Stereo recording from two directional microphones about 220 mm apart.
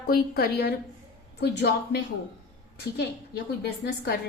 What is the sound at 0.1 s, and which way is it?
A woman's voice, 45° left (ahead or behind).